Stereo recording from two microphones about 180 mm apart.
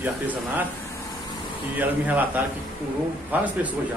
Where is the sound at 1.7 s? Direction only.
10° right (ahead or behind).